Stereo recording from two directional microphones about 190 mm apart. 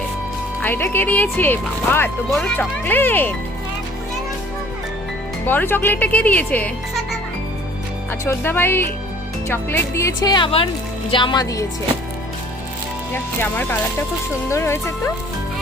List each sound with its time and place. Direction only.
0.6 s speech: 10° left (ahead or behind)
5.5 s speech: 10° left (ahead or behind)
8.2 s a woman's voice: 10° left (ahead or behind)
13.1 s speech: 10° left (ahead or behind)